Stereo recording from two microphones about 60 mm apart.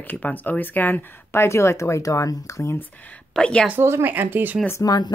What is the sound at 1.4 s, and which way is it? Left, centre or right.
Speech, left.